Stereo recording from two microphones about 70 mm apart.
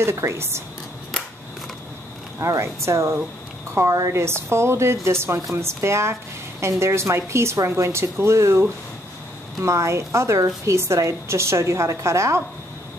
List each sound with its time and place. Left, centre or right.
0.0 s a woman's voice: right
2.4 s a woman's voice: right